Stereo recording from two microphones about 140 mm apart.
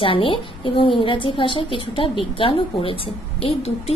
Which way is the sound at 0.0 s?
40° left (ahead or behind).